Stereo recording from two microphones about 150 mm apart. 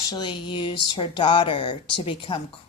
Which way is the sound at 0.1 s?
30° left (ahead or behind).